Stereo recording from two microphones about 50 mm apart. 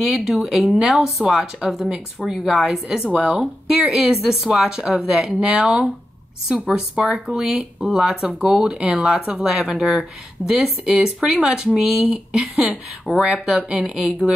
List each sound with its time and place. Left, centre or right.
0.1 s speech: centre
8.3 s speech: right